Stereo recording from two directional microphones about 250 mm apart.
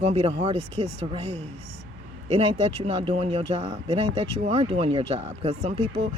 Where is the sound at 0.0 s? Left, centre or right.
Right.